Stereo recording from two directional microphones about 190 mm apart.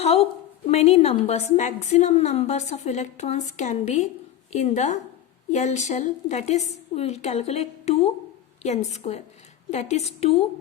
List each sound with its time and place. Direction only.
0.0 s a woman's voice: 30° left (ahead or behind)